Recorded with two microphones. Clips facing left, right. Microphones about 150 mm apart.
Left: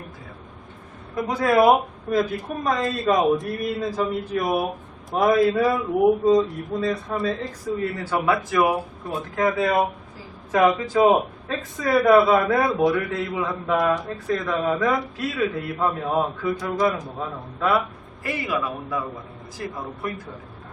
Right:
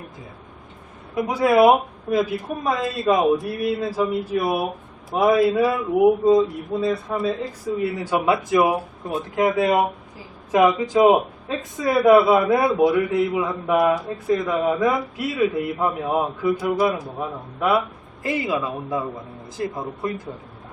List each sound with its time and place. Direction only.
1.1 s a man's voice: 10° right (ahead or behind)